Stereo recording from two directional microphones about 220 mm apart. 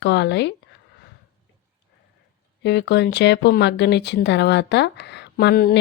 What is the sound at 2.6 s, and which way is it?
Speech, 50° left (ahead or behind).